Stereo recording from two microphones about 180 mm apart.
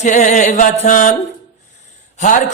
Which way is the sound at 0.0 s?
40° left (ahead or behind).